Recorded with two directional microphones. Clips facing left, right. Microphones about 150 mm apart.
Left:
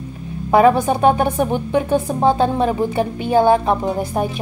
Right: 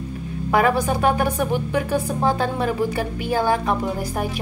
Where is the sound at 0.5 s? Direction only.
25° left (ahead or behind).